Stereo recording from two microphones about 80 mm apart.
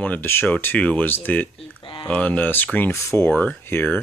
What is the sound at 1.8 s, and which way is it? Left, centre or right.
Speech, left.